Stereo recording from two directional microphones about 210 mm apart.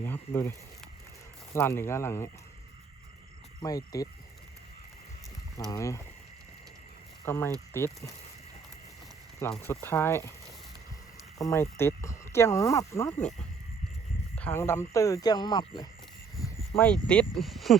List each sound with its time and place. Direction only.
0.0 s speech: 10° left (ahead or behind)
1.5 s speech: 10° left (ahead or behind)
3.6 s speech: 15° left (ahead or behind)
5.7 s speech: 15° left (ahead or behind)
7.3 s speech: 10° left (ahead or behind)
9.4 s speech: 10° left (ahead or behind)
11.3 s speech: 15° left (ahead or behind)
14.3 s speech: 10° left (ahead or behind)
16.4 s speech: 5° left (ahead or behind)